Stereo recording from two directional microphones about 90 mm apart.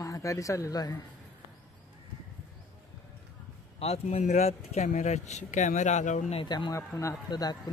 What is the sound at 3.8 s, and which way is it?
Speech, 90° left.